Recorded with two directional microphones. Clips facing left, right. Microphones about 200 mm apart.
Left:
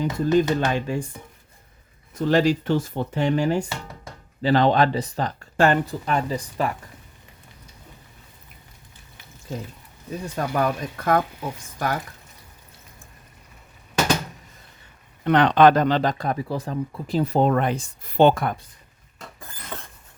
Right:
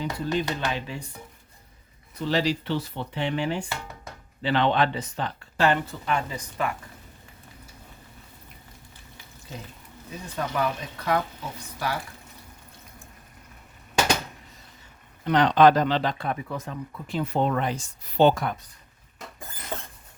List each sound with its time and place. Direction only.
0.0 s speech: 45° left (ahead or behind)
2.1 s speech: 50° left (ahead or behind); by 6.7 s 35° left (ahead or behind)
10.3 s speech: 50° left (ahead or behind)
15.2 s speech: 60° left (ahead or behind)
19.7 s a sound: 25° right (ahead or behind)